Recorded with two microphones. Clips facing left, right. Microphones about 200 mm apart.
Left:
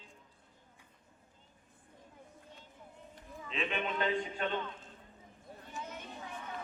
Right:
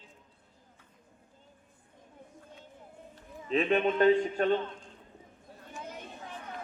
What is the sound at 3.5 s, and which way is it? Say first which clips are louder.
Speech: right 11 dB; 40° right (ahead or behind).